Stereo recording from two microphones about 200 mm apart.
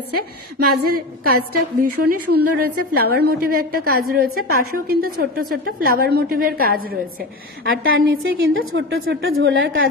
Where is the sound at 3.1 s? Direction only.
50° right (ahead or behind).